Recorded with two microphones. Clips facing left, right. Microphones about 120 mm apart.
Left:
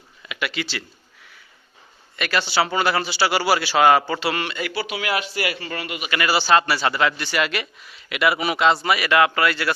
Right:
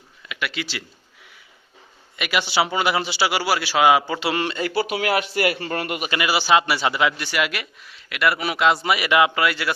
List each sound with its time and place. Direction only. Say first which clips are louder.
0.3 s speech: left 1 dB; centre (ahead or behind)
2.1 s a man's voice: even; 15° right (ahead or behind)
4.2 s a man's voice: right 2 dB; 25° right (ahead or behind)
4.7 s speech: right 4 dB; 45° right (ahead or behind)
6.1 s a man's voice: left 1 dB; 15° right (ahead or behind)
8.8 s a man's voice: even; 15° right (ahead or behind)